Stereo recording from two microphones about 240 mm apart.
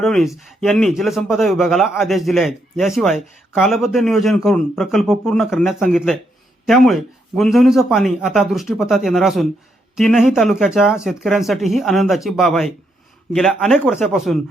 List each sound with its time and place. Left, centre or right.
0.0 s a man's voice: centre